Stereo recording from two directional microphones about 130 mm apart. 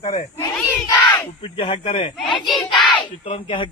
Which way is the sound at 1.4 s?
45° left (ahead or behind).